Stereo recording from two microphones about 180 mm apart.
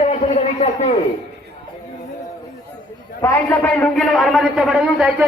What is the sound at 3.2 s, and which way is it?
A man's voice, 15° left (ahead or behind).